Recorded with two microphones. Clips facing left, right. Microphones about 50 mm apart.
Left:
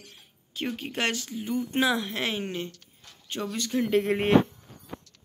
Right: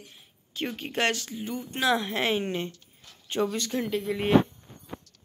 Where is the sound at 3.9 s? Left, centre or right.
Left.